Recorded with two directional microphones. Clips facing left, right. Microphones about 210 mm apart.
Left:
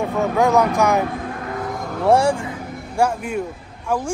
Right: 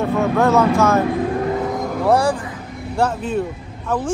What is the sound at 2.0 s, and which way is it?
Speech, 25° left (ahead or behind).